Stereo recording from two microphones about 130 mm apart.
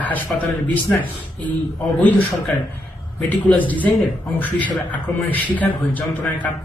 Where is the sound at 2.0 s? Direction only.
15° left (ahead or behind).